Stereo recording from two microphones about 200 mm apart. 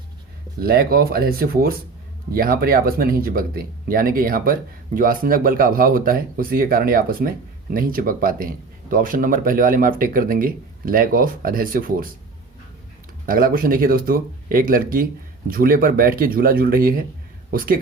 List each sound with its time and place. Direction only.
0.6 s speech: 50° right (ahead or behind)
13.2 s speech: 45° right (ahead or behind)